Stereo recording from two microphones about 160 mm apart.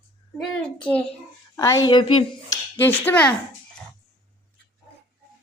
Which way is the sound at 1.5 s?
20° left (ahead or behind).